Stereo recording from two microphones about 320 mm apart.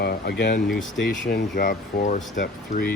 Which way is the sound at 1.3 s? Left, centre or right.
Left.